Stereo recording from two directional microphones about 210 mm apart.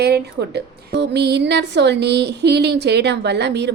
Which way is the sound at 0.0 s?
50° right (ahead or behind).